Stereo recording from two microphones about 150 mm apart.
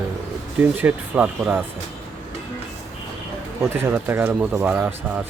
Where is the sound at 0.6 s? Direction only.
10° right (ahead or behind).